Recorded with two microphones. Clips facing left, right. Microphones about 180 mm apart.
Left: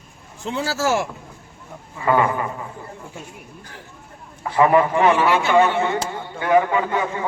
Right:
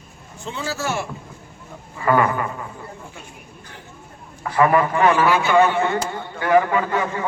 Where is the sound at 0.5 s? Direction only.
90° left.